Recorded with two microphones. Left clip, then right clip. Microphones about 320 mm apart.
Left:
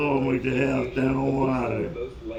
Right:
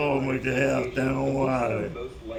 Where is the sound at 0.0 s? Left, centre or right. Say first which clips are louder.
Left 1 dB; centre.